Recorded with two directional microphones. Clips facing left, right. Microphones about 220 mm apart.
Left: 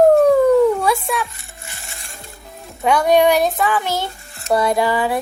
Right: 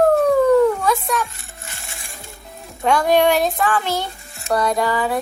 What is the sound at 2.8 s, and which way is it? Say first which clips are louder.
A child's voice: left 2 dB; centre (ahead or behind).